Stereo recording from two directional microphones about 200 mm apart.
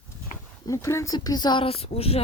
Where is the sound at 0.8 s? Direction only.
15° left (ahead or behind).